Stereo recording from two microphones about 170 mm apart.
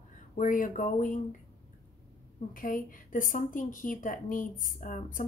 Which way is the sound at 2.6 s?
55° left (ahead or behind).